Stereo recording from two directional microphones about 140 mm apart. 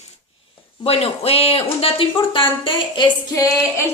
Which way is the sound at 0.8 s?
45° left (ahead or behind).